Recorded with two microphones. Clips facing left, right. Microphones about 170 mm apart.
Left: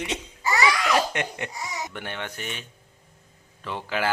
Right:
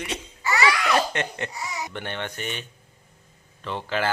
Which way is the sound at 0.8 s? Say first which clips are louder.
Even; 10° left (ahead or behind).